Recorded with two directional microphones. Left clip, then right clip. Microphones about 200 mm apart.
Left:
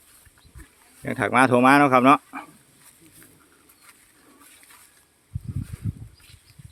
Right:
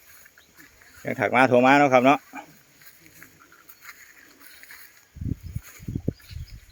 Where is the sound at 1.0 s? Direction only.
5° left (ahead or behind).